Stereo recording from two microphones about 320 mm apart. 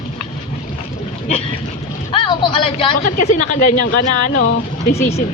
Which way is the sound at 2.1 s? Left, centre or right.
Centre.